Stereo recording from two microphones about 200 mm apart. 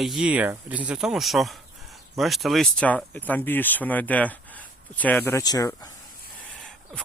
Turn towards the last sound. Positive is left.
turn(degrees=15)  # may be behind; listen again after turning